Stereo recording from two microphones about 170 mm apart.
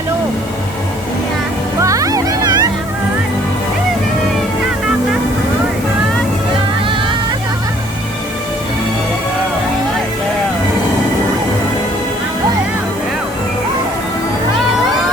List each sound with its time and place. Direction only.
1.8 s music: 20° right (ahead or behind)